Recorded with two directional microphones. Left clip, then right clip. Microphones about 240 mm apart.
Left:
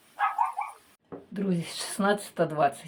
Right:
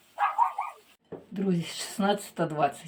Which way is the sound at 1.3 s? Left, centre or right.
Centre.